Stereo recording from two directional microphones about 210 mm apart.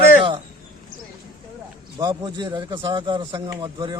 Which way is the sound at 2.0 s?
20° right (ahead or behind).